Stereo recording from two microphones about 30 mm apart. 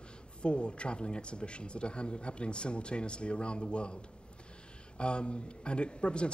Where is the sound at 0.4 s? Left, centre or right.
Left.